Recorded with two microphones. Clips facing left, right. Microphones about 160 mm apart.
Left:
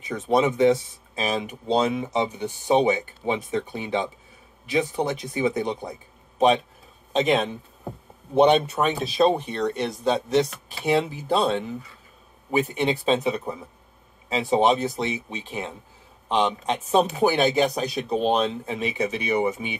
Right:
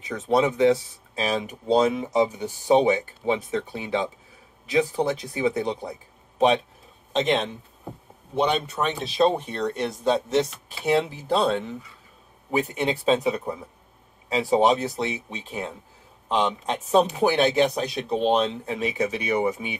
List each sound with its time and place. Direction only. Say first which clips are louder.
0.1 s speech: even; centre (ahead or behind)
7.1 s speech: left 2 dB; 5° left (ahead or behind)
8.4 s speech: left 6 dB; 20° left (ahead or behind)
8.8 s speech: right 2 dB; 10° left (ahead or behind)
9.6 s speech: left 1 dB; centre (ahead or behind)